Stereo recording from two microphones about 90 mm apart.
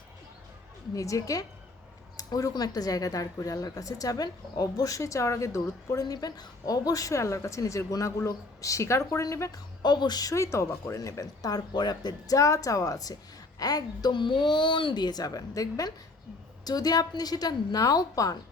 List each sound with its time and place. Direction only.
0.9 s speech: 40° left (ahead or behind)
9.8 s a woman's voice: 55° left (ahead or behind)
10.3 s a woman's voice: 30° left (ahead or behind)